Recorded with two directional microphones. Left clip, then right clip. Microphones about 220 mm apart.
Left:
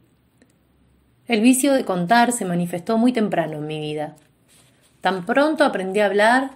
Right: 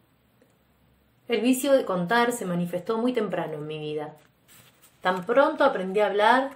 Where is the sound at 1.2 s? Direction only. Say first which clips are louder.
Left 6 dB; 20° left (ahead or behind).